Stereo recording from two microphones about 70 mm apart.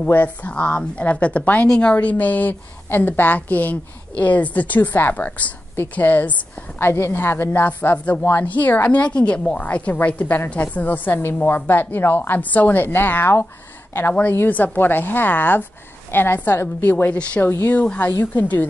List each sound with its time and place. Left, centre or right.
0.0 s a woman's voice: left
6.8 s a woman's voice: left